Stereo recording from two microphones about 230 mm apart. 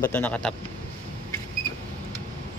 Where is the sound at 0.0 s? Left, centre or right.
Centre.